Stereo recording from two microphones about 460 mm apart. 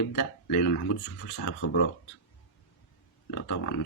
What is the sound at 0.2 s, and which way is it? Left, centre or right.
Speech, left.